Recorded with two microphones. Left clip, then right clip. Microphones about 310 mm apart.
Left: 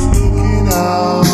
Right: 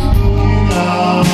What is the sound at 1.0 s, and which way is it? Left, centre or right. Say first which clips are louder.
Music: even; right.